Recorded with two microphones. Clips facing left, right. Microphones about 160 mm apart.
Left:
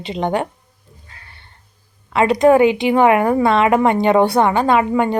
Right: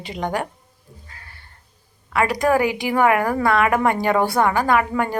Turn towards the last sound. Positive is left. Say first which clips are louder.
# left 4 dB
turn(degrees=20)  # may be behind; listen again after turning